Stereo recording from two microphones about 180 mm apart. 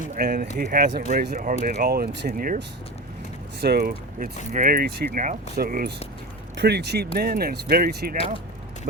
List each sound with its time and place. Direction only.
0.2 s speech: 55° right (ahead or behind)
3.6 s speech: 60° right (ahead or behind)
6.6 s speech: 65° right (ahead or behind)